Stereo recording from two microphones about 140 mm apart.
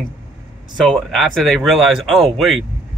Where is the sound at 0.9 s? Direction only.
Centre (ahead or behind).